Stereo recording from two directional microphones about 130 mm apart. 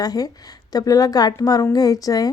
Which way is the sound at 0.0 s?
30° left (ahead or behind).